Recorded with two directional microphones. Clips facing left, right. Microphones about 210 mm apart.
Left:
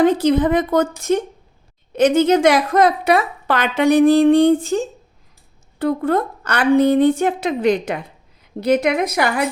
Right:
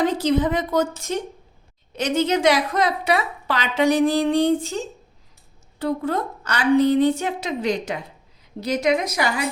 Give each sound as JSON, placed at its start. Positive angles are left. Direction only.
{"t": 0.0, "sound": "a woman's voice", "side_deg": 55}